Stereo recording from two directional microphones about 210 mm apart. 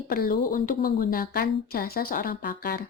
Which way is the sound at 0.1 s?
45° left (ahead or behind).